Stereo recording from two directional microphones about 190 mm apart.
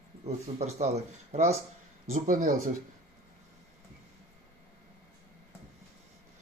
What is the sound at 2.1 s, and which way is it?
Speech, 45° right (ahead or behind).